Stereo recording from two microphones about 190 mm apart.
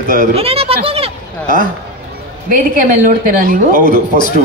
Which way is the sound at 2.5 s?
45° right (ahead or behind).